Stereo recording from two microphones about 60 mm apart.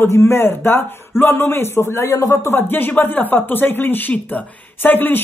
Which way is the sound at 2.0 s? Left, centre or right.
Left.